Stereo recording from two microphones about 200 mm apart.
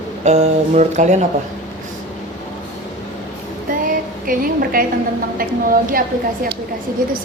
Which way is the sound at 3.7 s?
45° right (ahead or behind).